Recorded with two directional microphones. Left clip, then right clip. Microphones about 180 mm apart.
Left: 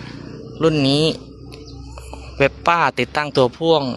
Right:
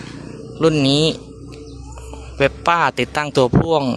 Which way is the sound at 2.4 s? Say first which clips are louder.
Even; centre (ahead or behind).